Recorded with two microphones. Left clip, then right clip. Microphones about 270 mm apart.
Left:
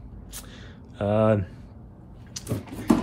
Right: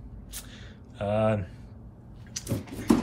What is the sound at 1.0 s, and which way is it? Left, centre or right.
Speech, left.